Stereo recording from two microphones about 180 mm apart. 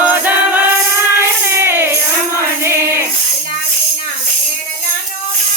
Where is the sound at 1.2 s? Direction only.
15° right (ahead or behind).